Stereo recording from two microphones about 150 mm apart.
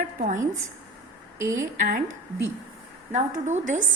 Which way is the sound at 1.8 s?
70° right (ahead or behind).